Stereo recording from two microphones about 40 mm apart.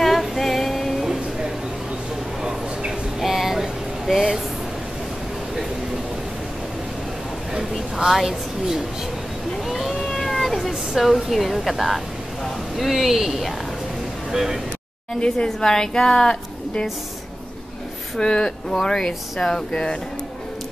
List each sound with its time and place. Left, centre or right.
0.0 s music: centre
2.4 s a sound: centre
8.1 s a woman's voice: centre
9.7 s cat: centre
10.7 s a woman's voice: centre
15.1 s a woman's voice: centre
18.1 s a woman's voice: centre